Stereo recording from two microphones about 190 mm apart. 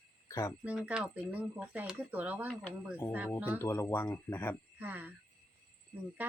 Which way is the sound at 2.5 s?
5° left (ahead or behind).